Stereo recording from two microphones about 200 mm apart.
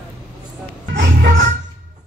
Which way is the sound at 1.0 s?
50° right (ahead or behind).